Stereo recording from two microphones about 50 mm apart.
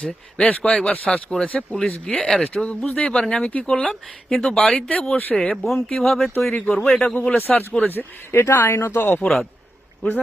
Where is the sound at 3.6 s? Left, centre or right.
Centre.